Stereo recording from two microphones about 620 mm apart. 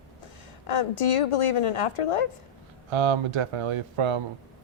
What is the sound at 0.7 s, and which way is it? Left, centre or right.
A woman's voice, left.